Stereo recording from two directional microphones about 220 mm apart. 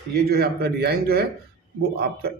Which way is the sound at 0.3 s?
45° right (ahead or behind).